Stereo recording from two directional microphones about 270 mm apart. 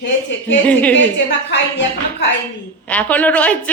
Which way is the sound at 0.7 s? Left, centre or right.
Centre.